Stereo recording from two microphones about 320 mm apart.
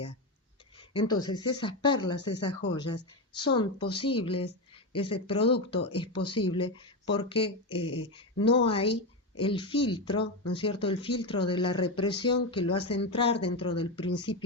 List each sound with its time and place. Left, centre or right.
0.8 s speech: centre
2.5 s speech: left
2.7 s speech: centre